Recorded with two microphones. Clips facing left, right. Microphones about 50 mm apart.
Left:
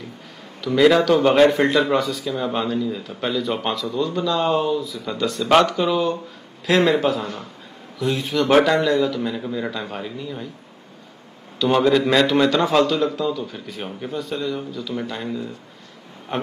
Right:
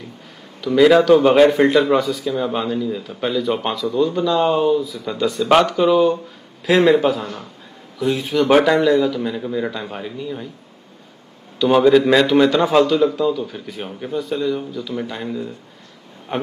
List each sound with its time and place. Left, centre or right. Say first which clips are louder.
0.7 s a man's voice: right 4 dB; centre
3.9 s speech: right 6 dB; centre
4.6 s a man's voice: right 4 dB; centre
11.6 s a man's voice: right 4 dB; centre